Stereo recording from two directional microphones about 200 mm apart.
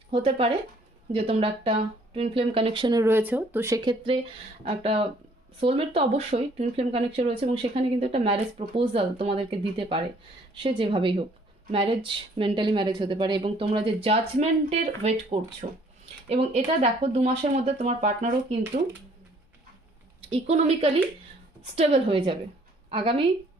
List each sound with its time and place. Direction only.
0.1 s a woman's voice: 30° right (ahead or behind)
20.3 s a woman's voice: 30° right (ahead or behind)